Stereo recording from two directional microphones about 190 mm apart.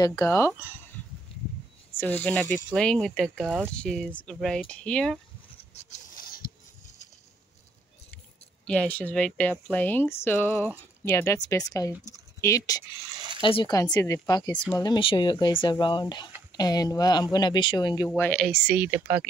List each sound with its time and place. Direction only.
0.0 s a woman's voice: 15° left (ahead or behind)
2.0 s speech: 5° left (ahead or behind)
5.8 s a sound: 40° left (ahead or behind)
8.6 s a woman's voice: 5° left (ahead or behind); by 19.2 s 10° right (ahead or behind)